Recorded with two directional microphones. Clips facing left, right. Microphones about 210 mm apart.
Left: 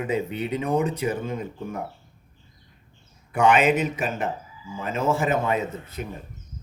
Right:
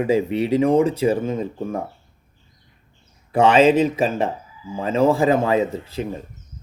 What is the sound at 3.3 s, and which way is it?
Speech, 90° right.